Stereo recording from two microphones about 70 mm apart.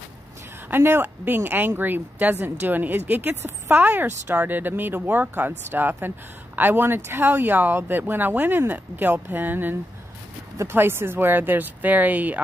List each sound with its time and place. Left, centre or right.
0.7 s speech: right